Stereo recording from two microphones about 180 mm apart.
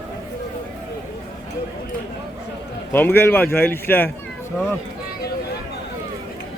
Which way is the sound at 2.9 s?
10° left (ahead or behind).